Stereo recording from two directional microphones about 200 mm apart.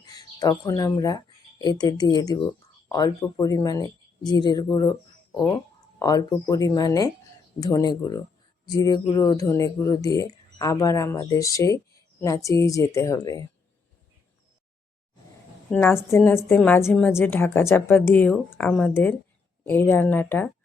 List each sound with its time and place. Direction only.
0.0 s speech: 20° left (ahead or behind)
6.0 s speech: 20° left (ahead or behind)
15.7 s speech: 10° left (ahead or behind)